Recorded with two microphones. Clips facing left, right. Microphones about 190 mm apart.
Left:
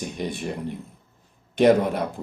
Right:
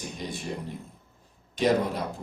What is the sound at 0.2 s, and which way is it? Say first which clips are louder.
Speech: left 7 dB; 60° left (ahead or behind).